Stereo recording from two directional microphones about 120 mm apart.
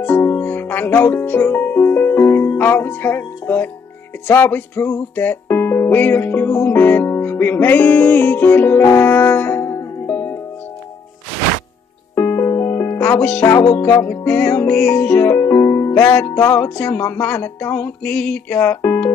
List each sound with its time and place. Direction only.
0.0 s music: 20° left (ahead or behind)
12.2 s music: 20° left (ahead or behind)
13.2 s music: 10° left (ahead or behind)